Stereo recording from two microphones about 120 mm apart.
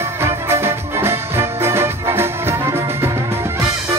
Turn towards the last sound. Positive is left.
turn(degrees=-20)  # may be behind; listen again after turning